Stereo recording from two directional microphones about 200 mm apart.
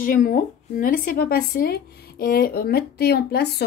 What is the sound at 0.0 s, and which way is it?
A woman's voice, 45° left (ahead or behind).